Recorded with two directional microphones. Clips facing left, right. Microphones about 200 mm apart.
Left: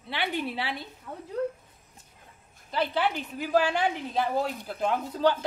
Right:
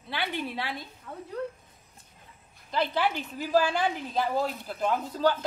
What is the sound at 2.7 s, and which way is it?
A woman's voice, 15° left (ahead or behind).